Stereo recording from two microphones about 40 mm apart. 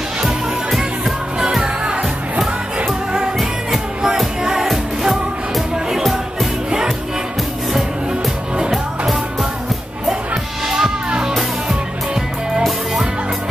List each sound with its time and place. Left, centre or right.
0.2 s music: centre
1.5 s music: centre
8.1 s music: centre
10.3 s music: centre
11.1 s music: right